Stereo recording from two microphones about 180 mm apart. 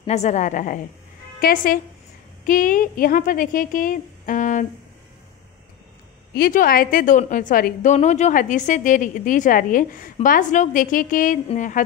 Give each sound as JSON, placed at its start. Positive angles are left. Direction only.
{"t": 0.0, "sound": "a woman's voice", "side_deg": 40}
{"t": 6.3, "sound": "a woman's voice", "side_deg": 55}